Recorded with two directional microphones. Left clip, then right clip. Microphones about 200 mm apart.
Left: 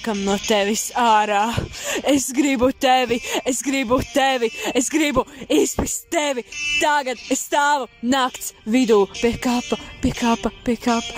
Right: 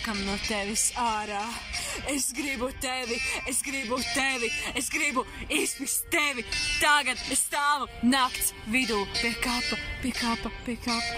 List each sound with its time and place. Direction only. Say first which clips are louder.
0.0 s speech: left 8 dB; 30° left (ahead or behind)
0.6 s speech: left 10 dB; 40° left (ahead or behind)